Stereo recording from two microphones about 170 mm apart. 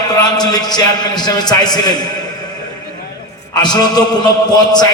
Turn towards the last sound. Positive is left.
turn(degrees=25)  # may be behind; listen again after turning